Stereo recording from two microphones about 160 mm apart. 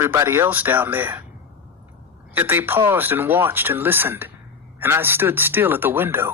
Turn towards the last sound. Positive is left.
turn(degrees=-15)  # may be behind; listen again after turning